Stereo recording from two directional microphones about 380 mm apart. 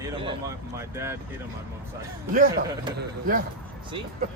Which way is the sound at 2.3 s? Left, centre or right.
Right.